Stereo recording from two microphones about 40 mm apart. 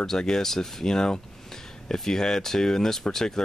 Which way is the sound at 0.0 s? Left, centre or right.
Centre.